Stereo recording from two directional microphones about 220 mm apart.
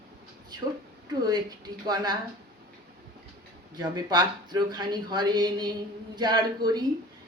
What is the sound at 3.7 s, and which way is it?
A man's voice, 20° right (ahead or behind).